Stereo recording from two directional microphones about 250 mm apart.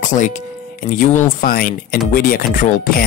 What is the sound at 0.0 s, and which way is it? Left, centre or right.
Speech, left.